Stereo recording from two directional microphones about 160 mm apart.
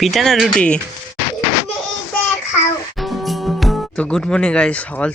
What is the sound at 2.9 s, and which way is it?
Speech, centre (ahead or behind).